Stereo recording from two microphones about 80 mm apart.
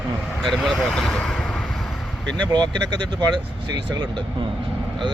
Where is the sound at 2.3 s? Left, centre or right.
Right.